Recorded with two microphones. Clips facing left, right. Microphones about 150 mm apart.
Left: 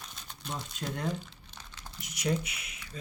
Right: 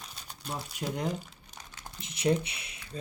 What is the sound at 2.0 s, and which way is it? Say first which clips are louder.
Speech: right 4 dB; 30° right (ahead or behind).